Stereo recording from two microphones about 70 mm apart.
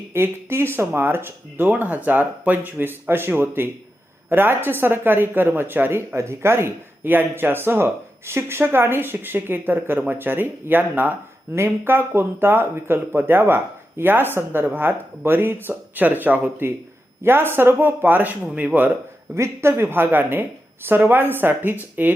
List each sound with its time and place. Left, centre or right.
0.1 s speech: right
19.3 s speech: right